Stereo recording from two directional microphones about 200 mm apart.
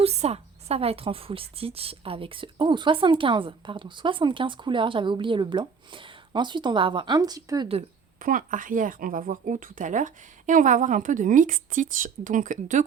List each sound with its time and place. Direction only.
0.0 s a woman's voice: 30° right (ahead or behind)
8.2 s speech: 45° right (ahead or behind)